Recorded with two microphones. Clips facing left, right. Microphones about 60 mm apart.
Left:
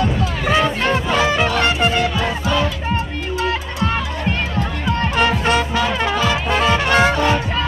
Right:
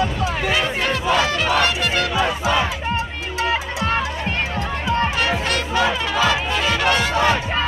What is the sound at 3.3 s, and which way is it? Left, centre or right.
Music, centre.